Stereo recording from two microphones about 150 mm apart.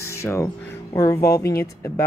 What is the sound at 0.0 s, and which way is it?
Music, 20° left (ahead or behind).